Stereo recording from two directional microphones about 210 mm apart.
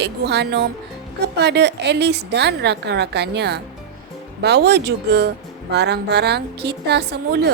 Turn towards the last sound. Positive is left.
turn(degrees=-50)  # may be behind; listen again after turning